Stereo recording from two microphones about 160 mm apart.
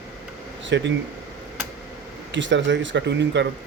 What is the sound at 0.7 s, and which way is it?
Speech, 90° right.